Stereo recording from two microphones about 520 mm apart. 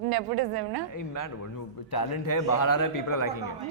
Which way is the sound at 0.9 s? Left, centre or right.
Left.